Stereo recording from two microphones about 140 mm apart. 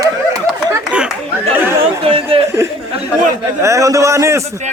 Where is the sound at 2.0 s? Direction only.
45° right (ahead or behind).